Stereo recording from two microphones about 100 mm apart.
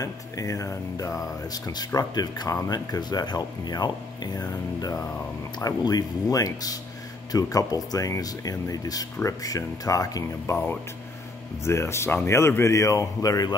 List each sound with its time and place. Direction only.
0.0 s speech: 35° left (ahead or behind)
11.6 s speech: 25° left (ahead or behind)